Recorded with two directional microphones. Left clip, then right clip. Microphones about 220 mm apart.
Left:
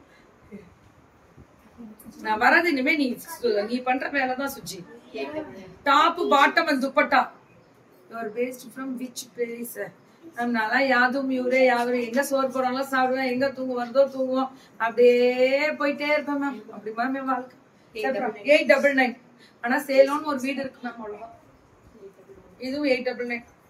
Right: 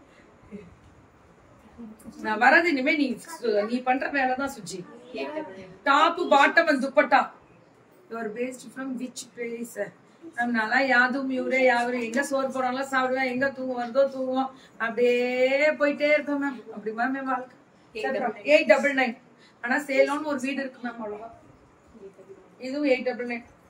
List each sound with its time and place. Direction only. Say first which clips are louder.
2.2 s a woman's voice: even; 10° left (ahead or behind)
5.9 s a woman's voice: left 1 dB; 10° left (ahead or behind)
10.3 s a woman's voice: even; 10° left (ahead or behind)
22.6 s a woman's voice: even; 10° left (ahead or behind)